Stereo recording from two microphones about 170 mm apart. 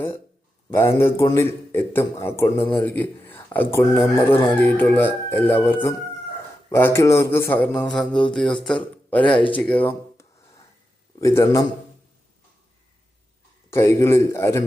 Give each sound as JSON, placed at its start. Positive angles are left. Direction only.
{"t": 0.7, "sound": "a man's voice", "side_deg": 15}
{"t": 11.2, "sound": "a man's voice", "side_deg": 20}
{"t": 13.7, "sound": "a man's voice", "side_deg": 15}